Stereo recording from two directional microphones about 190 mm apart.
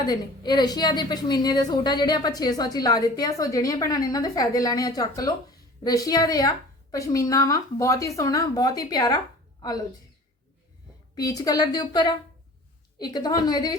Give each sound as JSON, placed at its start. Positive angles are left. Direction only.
{"t": 0.0, "sound": "a woman's voice", "side_deg": 20}
{"t": 11.2, "sound": "a woman's voice", "side_deg": 20}